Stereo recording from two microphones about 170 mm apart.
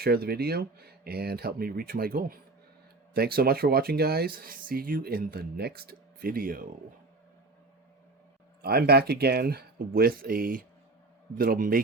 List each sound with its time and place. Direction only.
0.0 s speech: 65° right (ahead or behind)
8.6 s speech: 65° right (ahead or behind)